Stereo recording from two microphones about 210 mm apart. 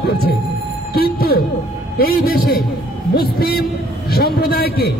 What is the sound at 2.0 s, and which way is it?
A man's voice, 45° left (ahead or behind).